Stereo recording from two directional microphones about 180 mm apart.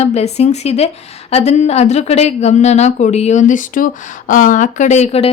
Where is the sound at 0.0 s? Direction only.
35° left (ahead or behind).